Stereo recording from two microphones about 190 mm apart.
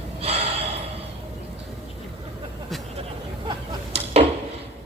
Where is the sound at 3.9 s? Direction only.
35° right (ahead or behind).